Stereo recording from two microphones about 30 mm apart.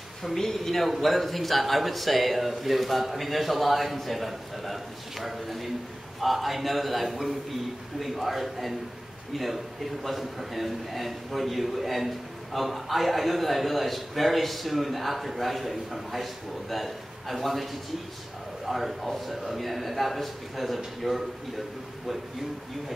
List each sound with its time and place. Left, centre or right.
0.4 s a man's voice: centre
18.7 s a man's voice: centre